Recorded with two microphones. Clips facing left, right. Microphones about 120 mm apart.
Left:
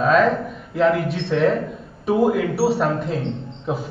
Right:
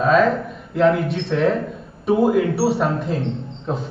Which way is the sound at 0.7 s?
Centre (ahead or behind).